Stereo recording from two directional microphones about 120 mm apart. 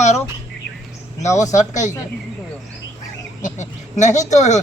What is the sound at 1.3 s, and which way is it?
Speech, 25° left (ahead or behind).